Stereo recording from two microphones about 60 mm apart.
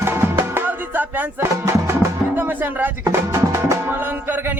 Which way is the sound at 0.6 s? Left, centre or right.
Right.